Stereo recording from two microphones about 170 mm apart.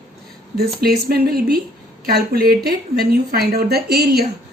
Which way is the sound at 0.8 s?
65° right (ahead or behind).